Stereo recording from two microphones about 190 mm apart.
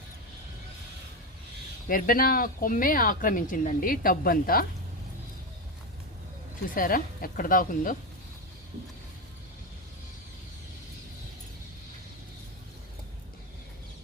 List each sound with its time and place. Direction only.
1.9 s speech: 50° left (ahead or behind)
6.7 s speech: 50° left (ahead or behind)